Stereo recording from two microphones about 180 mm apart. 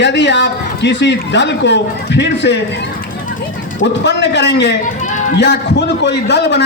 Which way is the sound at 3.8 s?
75° left (ahead or behind).